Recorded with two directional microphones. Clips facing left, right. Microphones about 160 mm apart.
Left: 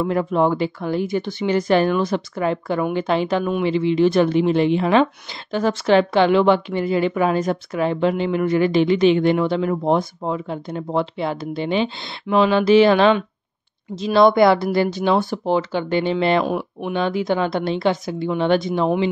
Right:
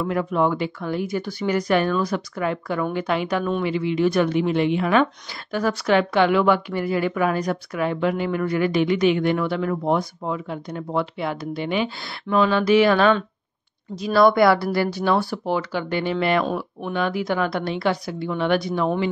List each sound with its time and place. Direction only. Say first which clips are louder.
0.0 s speech: left 3 dB; 30° left (ahead or behind)